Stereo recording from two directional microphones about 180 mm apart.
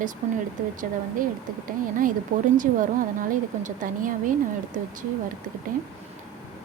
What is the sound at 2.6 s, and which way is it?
Speech, 50° right (ahead or behind).